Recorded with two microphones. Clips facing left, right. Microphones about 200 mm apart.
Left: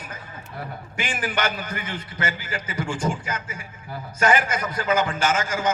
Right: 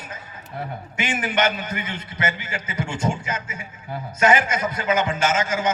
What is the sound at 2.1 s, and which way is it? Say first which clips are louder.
Speech: right 2 dB; 30° left (ahead or behind).